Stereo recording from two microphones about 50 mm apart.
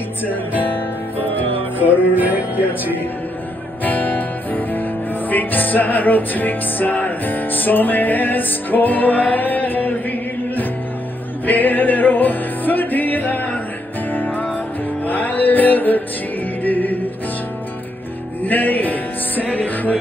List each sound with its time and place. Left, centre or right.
2.1 s music: right
3.8 s music: left
18.4 s music: left